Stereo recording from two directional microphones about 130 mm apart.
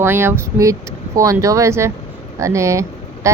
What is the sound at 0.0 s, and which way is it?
A woman's voice, 15° right (ahead or behind).